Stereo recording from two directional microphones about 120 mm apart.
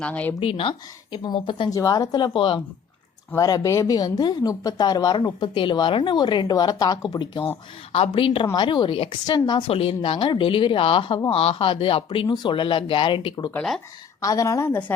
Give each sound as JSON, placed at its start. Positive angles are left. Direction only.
{"t": 0.0, "sound": "speech", "side_deg": 10}
{"t": 0.3, "sound": "speech", "side_deg": 50}
{"t": 1.7, "sound": "speech", "side_deg": 30}
{"t": 3.3, "sound": "speech", "side_deg": 30}
{"t": 7.9, "sound": "speech", "side_deg": 55}
{"t": 8.5, "sound": "speech", "side_deg": 40}
{"t": 13.5, "sound": "speech", "side_deg": 5}
{"t": 14.2, "sound": "a woman's voice", "side_deg": 30}